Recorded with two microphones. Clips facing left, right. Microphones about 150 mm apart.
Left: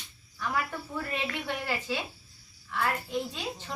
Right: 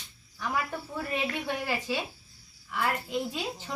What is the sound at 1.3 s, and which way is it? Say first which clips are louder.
A woman's voice: right 2 dB; 15° right (ahead or behind).